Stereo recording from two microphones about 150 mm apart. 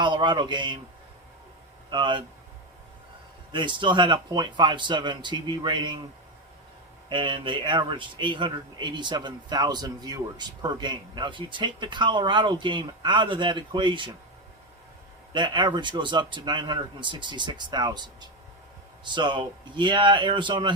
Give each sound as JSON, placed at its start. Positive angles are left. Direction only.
{"t": 0.0, "sound": "speech", "side_deg": -30}
{"t": 1.9, "sound": "speech", "side_deg": -30}
{"t": 3.5, "sound": "speech", "side_deg": -30}
{"t": 7.1, "sound": "speech", "side_deg": -35}
{"t": 15.3, "sound": "speech", "side_deg": -30}